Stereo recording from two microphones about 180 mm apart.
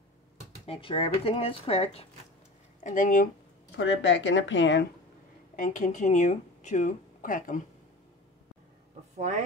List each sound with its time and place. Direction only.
0.7 s speech: 30° left (ahead or behind)
2.8 s speech: 45° left (ahead or behind)
3.7 s speech: 90° left
5.6 s speech: 45° left (ahead or behind)